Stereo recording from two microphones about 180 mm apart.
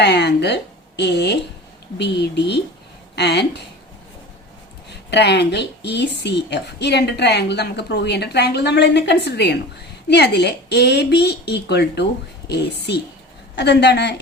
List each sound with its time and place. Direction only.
0.0 s a woman's voice: 70° left (ahead or behind)
5.1 s a woman's voice: 70° left (ahead or behind)